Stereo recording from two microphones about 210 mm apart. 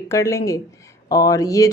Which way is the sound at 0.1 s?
15° left (ahead or behind).